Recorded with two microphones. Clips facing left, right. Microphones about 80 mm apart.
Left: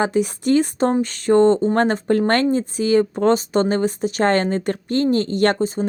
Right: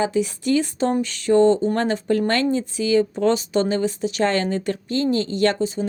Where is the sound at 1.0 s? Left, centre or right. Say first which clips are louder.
Left 1 dB; left.